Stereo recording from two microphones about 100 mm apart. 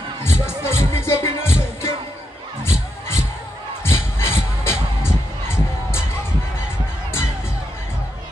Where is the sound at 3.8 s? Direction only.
25° left (ahead or behind).